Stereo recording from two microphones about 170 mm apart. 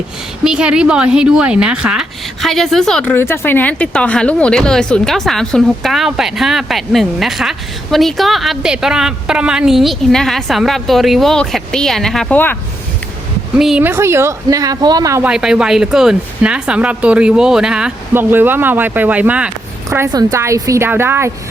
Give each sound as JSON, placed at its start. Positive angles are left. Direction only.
{"t": 0.4, "sound": "a woman's voice", "side_deg": -5}
{"t": 13.6, "sound": "speech", "side_deg": -5}
{"t": 15.2, "sound": "speech", "side_deg": -5}